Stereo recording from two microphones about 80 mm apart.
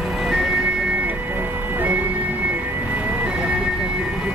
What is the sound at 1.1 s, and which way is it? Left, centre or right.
Music, right.